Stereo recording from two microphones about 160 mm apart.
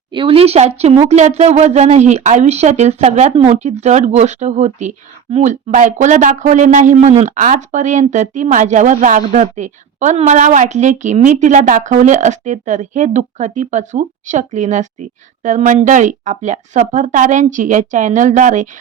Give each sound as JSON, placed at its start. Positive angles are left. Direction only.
{"t": 0.1, "sound": "speech", "side_deg": -35}